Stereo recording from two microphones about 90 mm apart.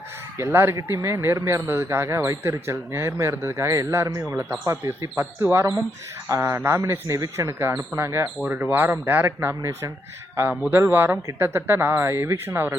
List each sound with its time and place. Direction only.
0.3 s speech: 25° right (ahead or behind)
6.2 s speech: 40° right (ahead or behind)
7.2 s speech: 45° right (ahead or behind)
7.6 s speech: 30° right (ahead or behind)
8.4 s speech: 20° right (ahead or behind)
9.6 s speech: 40° right (ahead or behind)
10.6 s speech: 20° right (ahead or behind)